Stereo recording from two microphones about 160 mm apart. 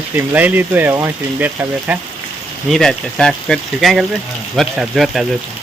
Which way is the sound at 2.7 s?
5° left (ahead or behind).